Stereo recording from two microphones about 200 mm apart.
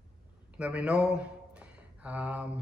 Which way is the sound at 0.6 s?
5° right (ahead or behind).